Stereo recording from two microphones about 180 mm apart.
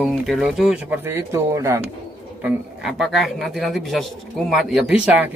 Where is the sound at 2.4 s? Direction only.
Centre (ahead or behind).